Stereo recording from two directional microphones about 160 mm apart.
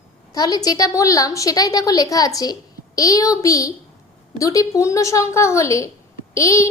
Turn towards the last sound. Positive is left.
turn(degrees=20)  # may be behind; listen again after turning